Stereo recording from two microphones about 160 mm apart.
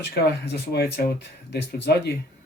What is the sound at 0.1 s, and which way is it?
Speech, 80° left.